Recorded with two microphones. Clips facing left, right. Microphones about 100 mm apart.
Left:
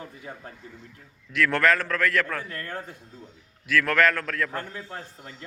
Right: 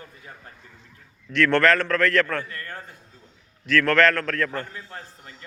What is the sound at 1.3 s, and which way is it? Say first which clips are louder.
A man's voice: right 3 dB; 5° left (ahead or behind).